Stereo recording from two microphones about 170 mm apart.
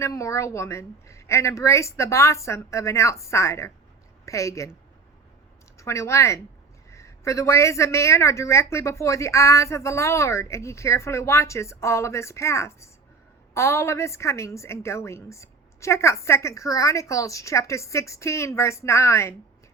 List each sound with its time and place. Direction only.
0.0 s speech: 20° left (ahead or behind)